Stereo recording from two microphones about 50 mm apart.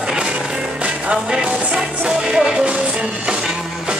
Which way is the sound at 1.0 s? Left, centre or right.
Centre.